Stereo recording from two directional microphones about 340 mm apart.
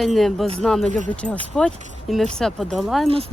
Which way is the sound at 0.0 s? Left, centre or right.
Centre.